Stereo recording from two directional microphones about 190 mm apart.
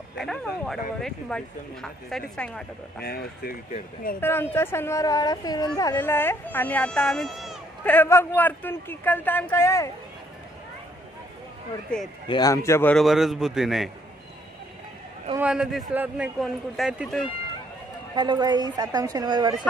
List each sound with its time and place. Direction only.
0.2 s speech: centre (ahead or behind)
3.0 s speech: 55° left (ahead or behind)
4.2 s speech: 10° left (ahead or behind)
12.3 s speech: 20° left (ahead or behind)
12.9 s speech: centre (ahead or behind)
15.3 s speech: 5° right (ahead or behind)
18.1 s a woman's voice: 25° right (ahead or behind)